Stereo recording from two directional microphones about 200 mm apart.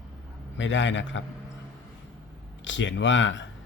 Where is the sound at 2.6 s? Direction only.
65° left (ahead or behind).